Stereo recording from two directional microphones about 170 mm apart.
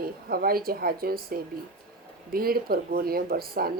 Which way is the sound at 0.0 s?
60° right (ahead or behind).